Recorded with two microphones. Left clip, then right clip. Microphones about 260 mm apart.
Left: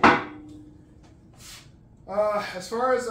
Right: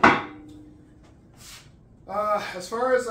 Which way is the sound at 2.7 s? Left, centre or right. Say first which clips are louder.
Even; centre.